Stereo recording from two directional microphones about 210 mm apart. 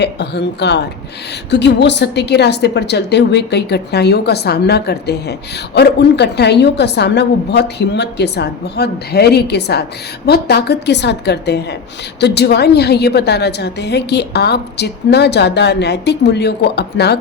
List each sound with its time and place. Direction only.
0.0 s a woman's voice: 55° left (ahead or behind)